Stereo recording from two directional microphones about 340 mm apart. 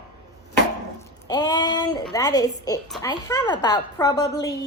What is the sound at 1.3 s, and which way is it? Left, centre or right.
A woman's voice, centre.